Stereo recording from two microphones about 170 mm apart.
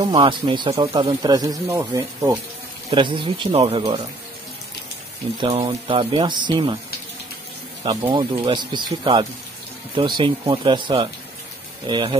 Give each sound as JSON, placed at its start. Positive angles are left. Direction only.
{"t": 0.0, "sound": "speech", "side_deg": -30}
{"t": 2.9, "sound": "speech", "side_deg": -30}
{"t": 5.7, "sound": "speech", "side_deg": -30}
{"t": 7.8, "sound": "speech", "side_deg": -25}